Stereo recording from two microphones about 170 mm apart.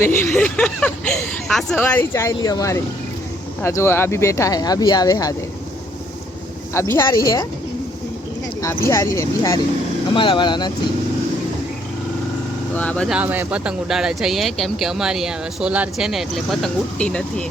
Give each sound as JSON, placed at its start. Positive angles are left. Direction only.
{"t": 0.0, "sound": "a sound", "side_deg": 10}
{"t": 1.7, "sound": "speech", "side_deg": 10}
{"t": 6.7, "sound": "speech", "side_deg": 15}
{"t": 8.6, "sound": "speech", "side_deg": 15}
{"t": 12.7, "sound": "speech", "side_deg": 10}
{"t": 13.1, "sound": "speech", "side_deg": -10}